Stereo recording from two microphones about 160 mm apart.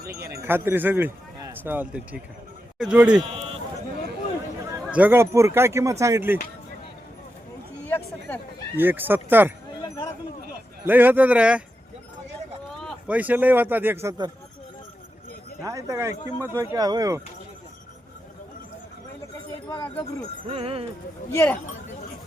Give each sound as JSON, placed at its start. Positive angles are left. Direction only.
{"t": 0.2, "sound": "a man's voice", "side_deg": -20}
{"t": 3.2, "sound": "run", "side_deg": -35}
{"t": 4.9, "sound": "a man's voice", "side_deg": -10}
{"t": 7.9, "sound": "a sound", "side_deg": 10}
{"t": 8.7, "sound": "a man's voice", "side_deg": -10}
{"t": 10.8, "sound": "a man's voice", "side_deg": -10}
{"t": 12.7, "sound": "a sound", "side_deg": 5}
{"t": 13.1, "sound": "a man's voice", "side_deg": -10}
{"t": 15.6, "sound": "speech", "side_deg": -20}
{"t": 20.5, "sound": "speech", "side_deg": -35}
{"t": 21.3, "sound": "speech", "side_deg": 10}